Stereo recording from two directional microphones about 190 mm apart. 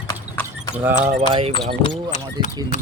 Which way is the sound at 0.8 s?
10° right (ahead or behind).